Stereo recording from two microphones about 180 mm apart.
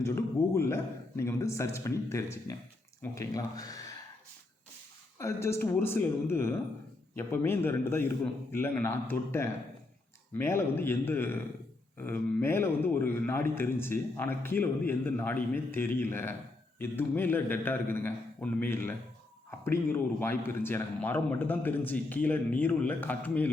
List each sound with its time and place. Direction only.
0.0 s a sound: 15° left (ahead or behind)
3.0 s speech: 20° left (ahead or behind)
5.1 s a man's voice: 15° left (ahead or behind)